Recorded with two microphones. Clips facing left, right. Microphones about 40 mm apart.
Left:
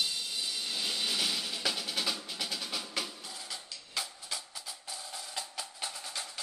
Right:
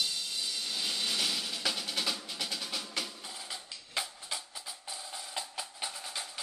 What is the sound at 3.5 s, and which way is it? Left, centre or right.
Music, centre.